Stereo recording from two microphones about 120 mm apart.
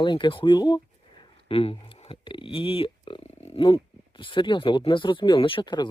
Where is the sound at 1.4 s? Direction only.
50° left (ahead or behind).